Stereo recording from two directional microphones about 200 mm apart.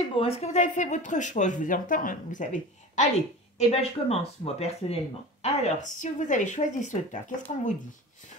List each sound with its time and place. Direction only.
0.1 s speech: 30° left (ahead or behind)